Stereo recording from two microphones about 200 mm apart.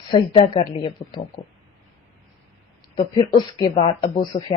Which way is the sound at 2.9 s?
25° left (ahead or behind).